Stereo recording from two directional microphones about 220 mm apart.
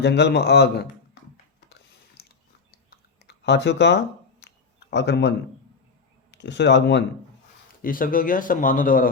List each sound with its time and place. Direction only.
0.0 s a man's voice: 50° left (ahead or behind)
2.9 s clicking: 50° left (ahead or behind)
6.3 s a man's voice: 50° left (ahead or behind)
7.8 s speech: 40° left (ahead or behind)